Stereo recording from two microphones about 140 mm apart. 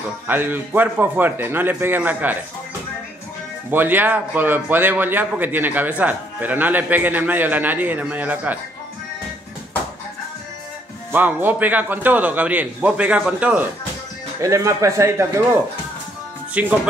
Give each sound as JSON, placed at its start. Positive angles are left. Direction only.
{"t": 0.3, "sound": "a man's voice", "side_deg": -15}
{"t": 3.7, "sound": "a man's voice", "side_deg": -15}
{"t": 11.1, "sound": "a man's voice", "side_deg": -15}
{"t": 14.4, "sound": "speech", "side_deg": -20}
{"t": 16.6, "sound": "a man's voice", "side_deg": -10}